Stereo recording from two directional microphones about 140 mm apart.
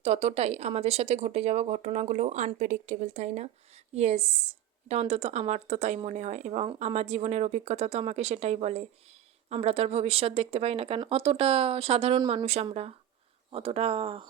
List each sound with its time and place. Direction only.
0.0 s speech: 50° right (ahead or behind)